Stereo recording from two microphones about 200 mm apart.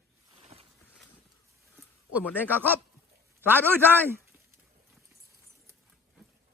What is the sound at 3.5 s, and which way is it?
Speech, 10° right (ahead or behind).